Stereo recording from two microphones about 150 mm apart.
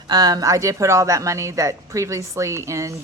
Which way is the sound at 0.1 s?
25° right (ahead or behind).